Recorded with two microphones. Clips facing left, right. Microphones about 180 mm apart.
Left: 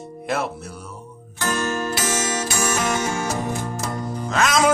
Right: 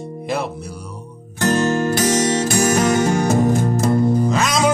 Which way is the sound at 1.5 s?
45° right (ahead or behind).